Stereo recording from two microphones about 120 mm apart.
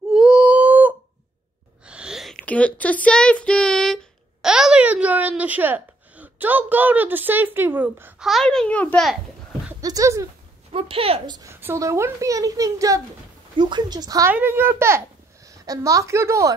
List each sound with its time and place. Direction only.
0.1 s a sound: 5° right (ahead or behind)
2.4 s child singing: 10° left (ahead or behind); by 8.3 s 15° right (ahead or behind)
8.3 s a child's voice: 5° left (ahead or behind)
9.8 s a woman's voice: 30° right (ahead or behind)
10.7 s speech: 50° right (ahead or behind)
11.2 s speech: 35° right (ahead or behind)
11.6 s a woman's voice: 25° right (ahead or behind)
13.6 s speech: 40° right (ahead or behind)
14.3 s a woman's voice: 15° right (ahead or behind)